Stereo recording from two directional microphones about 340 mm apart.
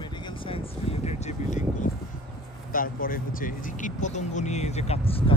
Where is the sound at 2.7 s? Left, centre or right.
Left.